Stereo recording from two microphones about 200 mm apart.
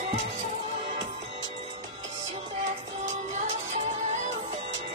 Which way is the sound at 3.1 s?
35° right (ahead or behind).